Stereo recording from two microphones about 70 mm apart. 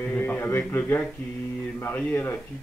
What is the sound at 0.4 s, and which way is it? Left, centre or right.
A man's voice, left.